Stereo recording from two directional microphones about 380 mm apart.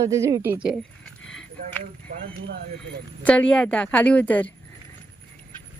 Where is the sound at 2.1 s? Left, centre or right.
Centre.